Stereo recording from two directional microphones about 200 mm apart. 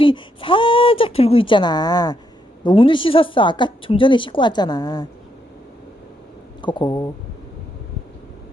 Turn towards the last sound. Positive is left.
turn(degrees=20)  # may be behind; listen again after turning